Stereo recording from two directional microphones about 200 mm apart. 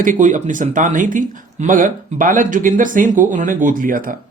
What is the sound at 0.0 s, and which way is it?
Speech, 40° right (ahead or behind).